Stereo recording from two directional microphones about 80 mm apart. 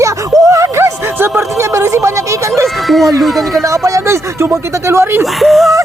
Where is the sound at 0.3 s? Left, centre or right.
Right.